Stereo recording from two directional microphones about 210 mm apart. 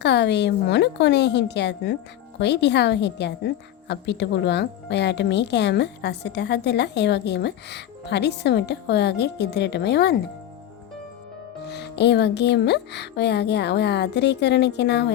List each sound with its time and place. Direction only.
0.0 s a woman's voice: 55° left (ahead or behind)
11.6 s a woman's voice: 50° left (ahead or behind)